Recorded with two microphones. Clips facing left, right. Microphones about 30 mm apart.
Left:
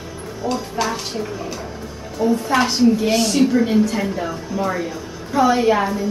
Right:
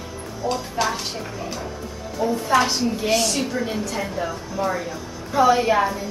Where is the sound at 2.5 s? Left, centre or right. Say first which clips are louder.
Left 3 dB; centre.